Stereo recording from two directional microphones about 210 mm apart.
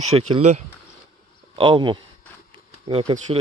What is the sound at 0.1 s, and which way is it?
Speech, 30° right (ahead or behind).